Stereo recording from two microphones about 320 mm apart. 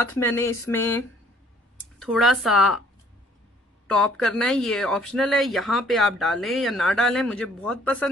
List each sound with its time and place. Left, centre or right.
0.0 s speech: centre
3.8 s speech: centre